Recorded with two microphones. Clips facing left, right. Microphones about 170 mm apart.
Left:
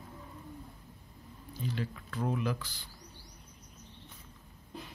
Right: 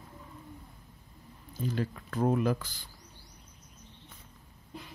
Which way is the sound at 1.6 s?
45° right (ahead or behind).